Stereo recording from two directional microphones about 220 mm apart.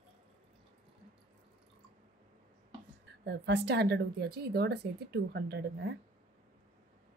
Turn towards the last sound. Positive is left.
turn(degrees=-50)  # may be behind; listen again after turning